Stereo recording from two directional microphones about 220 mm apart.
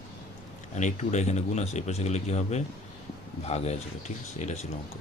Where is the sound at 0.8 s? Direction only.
30° left (ahead or behind).